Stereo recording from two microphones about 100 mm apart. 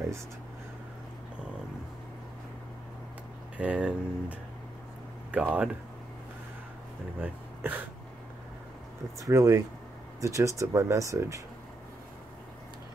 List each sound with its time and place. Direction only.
3.5 s speech: 15° right (ahead or behind)
7.2 s speech: 20° right (ahead or behind)
9.2 s speech: 35° right (ahead or behind)